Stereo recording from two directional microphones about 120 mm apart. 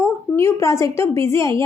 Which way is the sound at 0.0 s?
20° left (ahead or behind).